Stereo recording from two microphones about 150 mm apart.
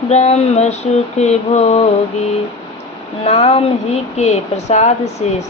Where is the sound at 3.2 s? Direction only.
45° left (ahead or behind).